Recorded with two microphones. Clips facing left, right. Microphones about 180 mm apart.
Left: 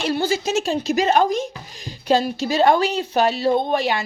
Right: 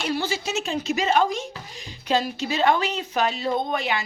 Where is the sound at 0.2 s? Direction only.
40° left (ahead or behind).